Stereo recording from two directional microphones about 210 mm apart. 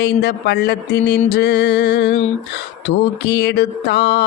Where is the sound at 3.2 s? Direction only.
55° left (ahead or behind).